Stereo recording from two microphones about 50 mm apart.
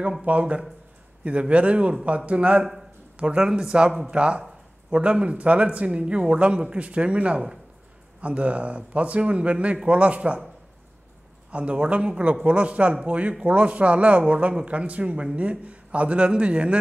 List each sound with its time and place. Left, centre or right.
0.2 s speech: right
11.5 s speech: right